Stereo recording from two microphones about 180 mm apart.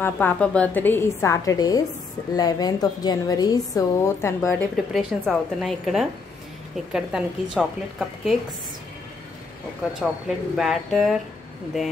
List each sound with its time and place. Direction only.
0.0 s a woman's voice: 10° left (ahead or behind)
4.9 s a woman's voice: centre (ahead or behind)
10.2 s a woman's voice: centre (ahead or behind)